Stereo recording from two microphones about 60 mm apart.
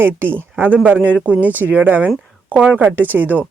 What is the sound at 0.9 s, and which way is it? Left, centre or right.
Speech, right.